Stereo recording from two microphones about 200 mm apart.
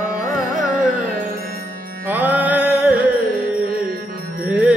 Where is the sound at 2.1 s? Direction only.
10° right (ahead or behind).